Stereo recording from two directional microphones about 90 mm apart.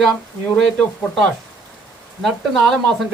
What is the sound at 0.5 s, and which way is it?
Speech, 5° left (ahead or behind).